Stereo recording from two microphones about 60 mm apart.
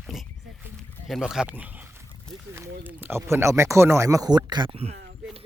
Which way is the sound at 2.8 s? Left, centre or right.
Right.